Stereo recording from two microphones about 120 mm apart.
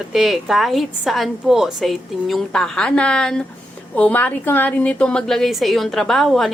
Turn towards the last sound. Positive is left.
turn(degrees=0)  # may be behind; listen again after turning